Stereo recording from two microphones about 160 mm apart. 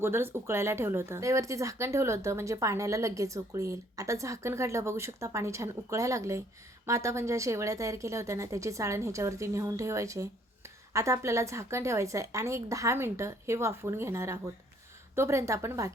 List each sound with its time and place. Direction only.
0.0 s a woman's voice: 15° right (ahead or behind)